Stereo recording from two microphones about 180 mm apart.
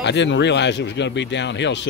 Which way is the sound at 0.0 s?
75° left (ahead or behind).